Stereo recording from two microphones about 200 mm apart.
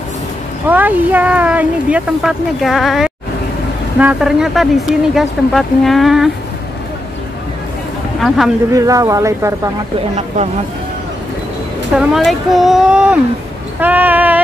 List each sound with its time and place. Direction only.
0.7 s speech: 10° right (ahead or behind)
8.7 s speech: 15° right (ahead or behind)
10.1 s speech: 35° right (ahead or behind)
12.0 s speech: centre (ahead or behind)